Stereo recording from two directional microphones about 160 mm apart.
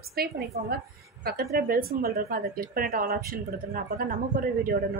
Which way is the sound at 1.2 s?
75° right (ahead or behind).